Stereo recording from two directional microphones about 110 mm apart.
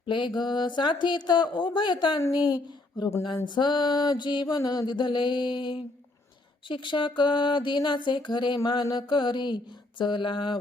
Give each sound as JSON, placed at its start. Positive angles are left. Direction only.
{"t": 0.1, "sound": "music", "side_deg": 45}
{"t": 2.5, "sound": "speech", "side_deg": 40}
{"t": 3.5, "sound": "music", "side_deg": 45}